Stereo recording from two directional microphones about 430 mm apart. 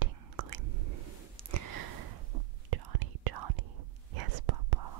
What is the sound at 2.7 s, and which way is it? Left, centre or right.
Whispering, right.